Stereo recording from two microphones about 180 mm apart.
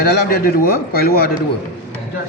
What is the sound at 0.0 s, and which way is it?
A man's voice, 55° left (ahead or behind).